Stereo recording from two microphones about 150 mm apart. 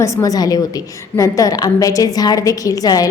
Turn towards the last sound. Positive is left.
turn(degrees=25)  # may be behind; listen again after turning